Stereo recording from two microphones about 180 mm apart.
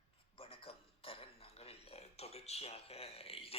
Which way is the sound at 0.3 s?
30° left (ahead or behind).